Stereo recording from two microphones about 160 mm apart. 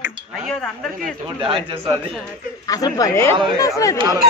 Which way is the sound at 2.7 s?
20° left (ahead or behind).